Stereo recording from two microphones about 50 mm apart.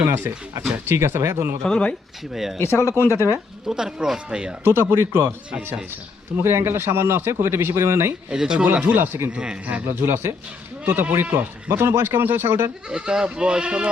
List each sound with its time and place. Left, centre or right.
0.1 s a man's voice: right
1.6 s speech: centre
2.3 s speech: centre
2.6 s speech: left
3.1 s speech: left
3.7 s speech: centre
4.6 s speech: right
6.3 s a man's voice: right
8.3 s speech: centre
8.6 s speech: right
9.0 s speech: right
9.3 s speech: centre
9.8 s speech: right
12.9 s speech: centre